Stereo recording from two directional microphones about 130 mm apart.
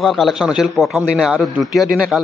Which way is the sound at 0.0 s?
Centre (ahead or behind).